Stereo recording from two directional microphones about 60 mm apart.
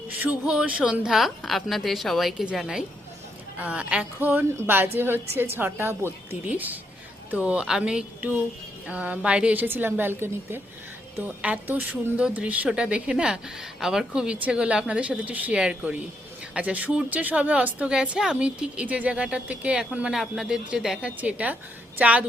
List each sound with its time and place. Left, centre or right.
0.4 s a woman's voice: centre
1.0 s a woman's voice: centre
3.6 s speech: right
4.2 s a woman's voice: right
6.5 s a woman's voice: right
9.6 s a woman's voice: right
11.2 s a woman's voice: right; by 21.0 s centre
21.2 s speech: right